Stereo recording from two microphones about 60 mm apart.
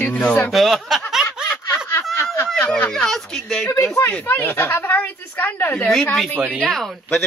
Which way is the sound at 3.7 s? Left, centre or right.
Left.